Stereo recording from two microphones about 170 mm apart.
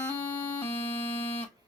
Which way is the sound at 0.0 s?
10° left (ahead or behind).